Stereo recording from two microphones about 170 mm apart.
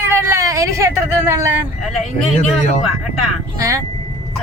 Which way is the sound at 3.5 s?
20° right (ahead or behind).